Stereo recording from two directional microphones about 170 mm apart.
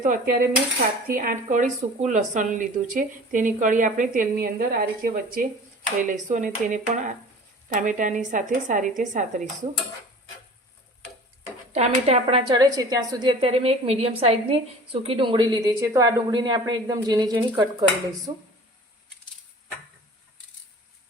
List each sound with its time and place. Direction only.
0.0 s cutlery: 60° right (ahead or behind)
1.1 s speech: 55° right (ahead or behind)
11.7 s a woman's voice: 40° right (ahead or behind); by 18.4 s 25° right (ahead or behind)